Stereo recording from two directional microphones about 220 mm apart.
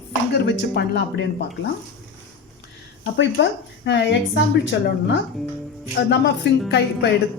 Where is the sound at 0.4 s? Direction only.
50° left (ahead or behind).